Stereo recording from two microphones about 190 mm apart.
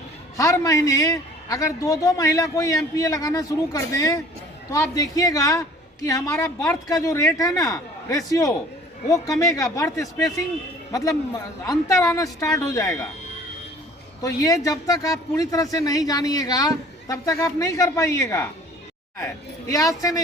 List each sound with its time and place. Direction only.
0.3 s a man's voice: 15° left (ahead or behind)
14.2 s a man's voice: 20° left (ahead or behind)